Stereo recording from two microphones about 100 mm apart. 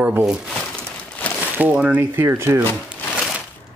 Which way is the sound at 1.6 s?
15° right (ahead or behind).